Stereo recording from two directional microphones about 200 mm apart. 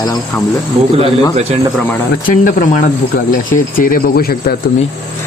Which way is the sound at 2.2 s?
40° left (ahead or behind).